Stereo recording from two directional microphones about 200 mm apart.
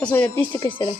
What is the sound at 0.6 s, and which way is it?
Speech, 25° left (ahead or behind).